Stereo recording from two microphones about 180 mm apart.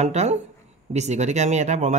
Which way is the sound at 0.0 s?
40° right (ahead or behind).